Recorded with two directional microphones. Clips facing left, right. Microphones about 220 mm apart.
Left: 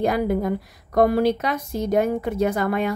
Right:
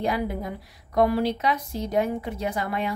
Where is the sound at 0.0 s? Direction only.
50° left (ahead or behind).